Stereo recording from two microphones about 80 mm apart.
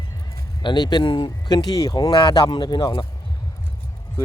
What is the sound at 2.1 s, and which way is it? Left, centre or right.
Speech, left.